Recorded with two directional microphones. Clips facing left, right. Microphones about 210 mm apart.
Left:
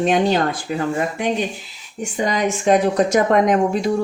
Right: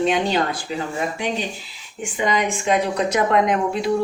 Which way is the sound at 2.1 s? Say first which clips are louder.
Left 1 dB; 40° left (ahead or behind).